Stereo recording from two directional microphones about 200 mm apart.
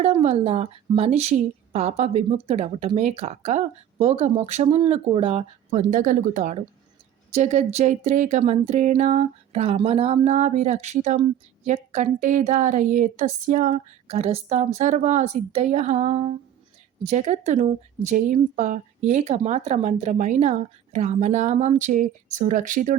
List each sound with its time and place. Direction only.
0.0 s speech: 35° right (ahead or behind)